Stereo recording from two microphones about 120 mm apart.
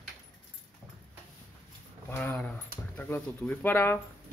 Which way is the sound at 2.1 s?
15° left (ahead or behind).